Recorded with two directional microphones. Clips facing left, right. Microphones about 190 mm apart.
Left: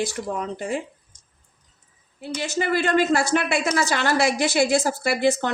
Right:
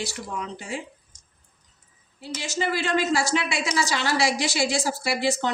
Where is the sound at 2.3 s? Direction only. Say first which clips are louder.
Left 4 dB; 55° left (ahead or behind).